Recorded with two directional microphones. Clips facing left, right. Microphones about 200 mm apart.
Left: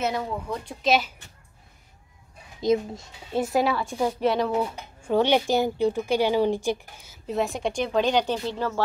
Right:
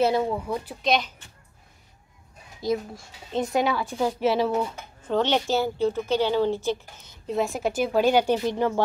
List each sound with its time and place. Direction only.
0.8 s a woman's voice: 5° left (ahead or behind)
2.6 s speech: 20° left (ahead or behind)
3.3 s a woman's voice: 5° left (ahead or behind)
5.0 s a woman's voice: 10° left (ahead or behind); by 8.8 s 15° right (ahead or behind)